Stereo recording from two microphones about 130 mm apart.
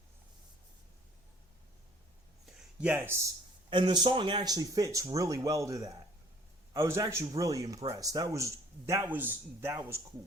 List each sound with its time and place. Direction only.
2.5 s speech: 10° right (ahead or behind)
3.7 s speech: 40° right (ahead or behind); by 9.7 s 15° right (ahead or behind)